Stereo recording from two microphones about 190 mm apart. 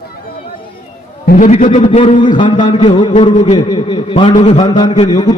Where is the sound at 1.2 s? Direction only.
50° left (ahead or behind).